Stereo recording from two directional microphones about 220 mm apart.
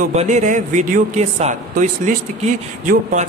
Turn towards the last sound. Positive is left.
turn(degrees=-35)  # may be behind; listen again after turning